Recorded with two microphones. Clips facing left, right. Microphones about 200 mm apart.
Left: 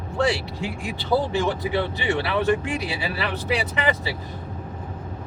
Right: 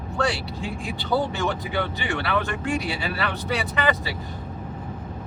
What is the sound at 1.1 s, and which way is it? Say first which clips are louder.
Speech: left 2 dB; 25° left (ahead or behind).